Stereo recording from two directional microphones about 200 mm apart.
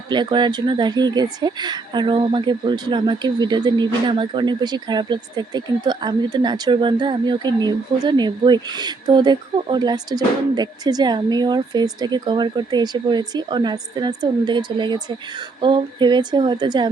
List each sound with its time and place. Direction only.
0.1 s speech: 20° right (ahead or behind)